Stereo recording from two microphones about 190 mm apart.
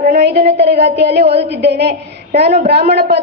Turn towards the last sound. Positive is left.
turn(degrees=-60)  # may be behind; listen again after turning